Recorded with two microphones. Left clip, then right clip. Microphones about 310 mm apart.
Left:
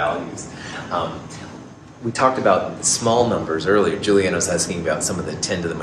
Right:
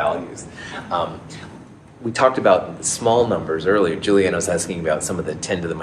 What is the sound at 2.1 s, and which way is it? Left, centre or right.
Speech, right.